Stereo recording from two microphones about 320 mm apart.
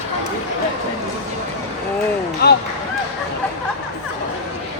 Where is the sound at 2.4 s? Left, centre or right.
Left.